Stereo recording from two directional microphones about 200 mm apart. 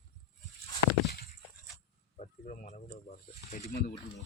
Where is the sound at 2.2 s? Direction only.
35° left (ahead or behind).